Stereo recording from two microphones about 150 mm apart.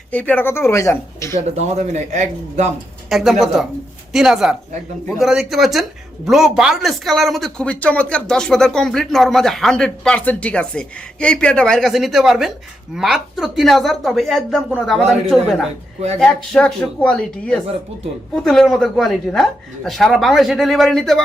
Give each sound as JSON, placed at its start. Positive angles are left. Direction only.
{"t": 0.1, "sound": "speech", "side_deg": 10}
{"t": 1.5, "sound": "a man's voice", "side_deg": -50}
{"t": 3.1, "sound": "speech", "side_deg": 0}